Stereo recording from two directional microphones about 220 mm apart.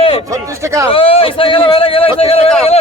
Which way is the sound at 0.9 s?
25° left (ahead or behind).